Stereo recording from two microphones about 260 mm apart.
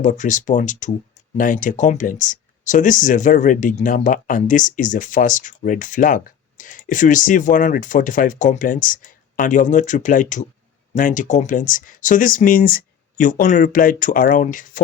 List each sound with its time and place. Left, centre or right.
0.0 s speech: left